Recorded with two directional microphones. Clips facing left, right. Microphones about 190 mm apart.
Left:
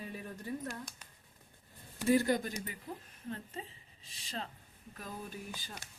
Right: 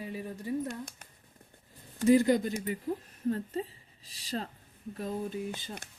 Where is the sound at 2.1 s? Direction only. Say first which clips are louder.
Right 6 dB; 20° right (ahead or behind).